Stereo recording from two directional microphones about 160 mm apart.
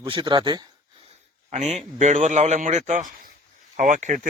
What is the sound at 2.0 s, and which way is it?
A man's voice, 50° right (ahead or behind).